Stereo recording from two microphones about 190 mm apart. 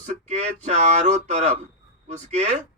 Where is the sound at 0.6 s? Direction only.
40° right (ahead or behind).